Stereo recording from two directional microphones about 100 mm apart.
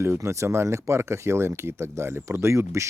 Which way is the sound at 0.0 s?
30° right (ahead or behind).